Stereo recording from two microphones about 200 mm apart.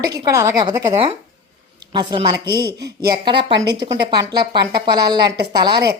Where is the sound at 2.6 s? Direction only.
50° right (ahead or behind).